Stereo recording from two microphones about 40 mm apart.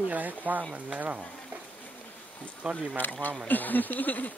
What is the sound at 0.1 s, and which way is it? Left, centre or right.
Speech, right.